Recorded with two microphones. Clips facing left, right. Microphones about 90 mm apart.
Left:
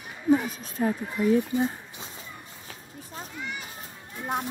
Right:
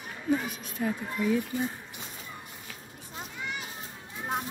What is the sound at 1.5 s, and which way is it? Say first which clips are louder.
Speech: left 5 dB; 25° left (ahead or behind).